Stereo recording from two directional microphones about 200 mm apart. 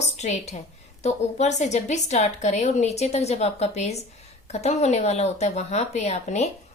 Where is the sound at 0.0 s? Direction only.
35° left (ahead or behind).